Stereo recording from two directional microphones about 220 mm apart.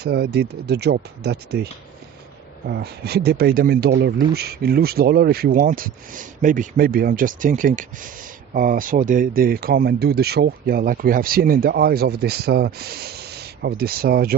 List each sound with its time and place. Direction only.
0.0 s speech: 45° right (ahead or behind)
2.6 s speech: 45° right (ahead or behind)